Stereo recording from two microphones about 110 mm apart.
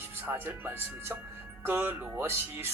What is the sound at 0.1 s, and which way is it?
Speech, 20° right (ahead or behind).